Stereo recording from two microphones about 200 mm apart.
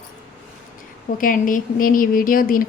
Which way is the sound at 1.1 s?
40° left (ahead or behind).